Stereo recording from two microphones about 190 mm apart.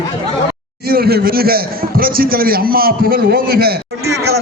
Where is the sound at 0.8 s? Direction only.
55° right (ahead or behind).